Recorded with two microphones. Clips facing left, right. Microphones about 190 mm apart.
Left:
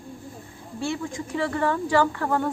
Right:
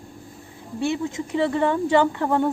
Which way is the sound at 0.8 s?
20° right (ahead or behind).